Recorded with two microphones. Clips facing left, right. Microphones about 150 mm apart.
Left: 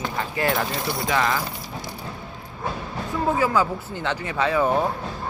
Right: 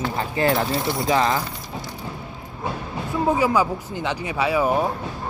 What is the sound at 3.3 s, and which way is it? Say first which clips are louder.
Speech: right 2 dB; 15° right (ahead or behind).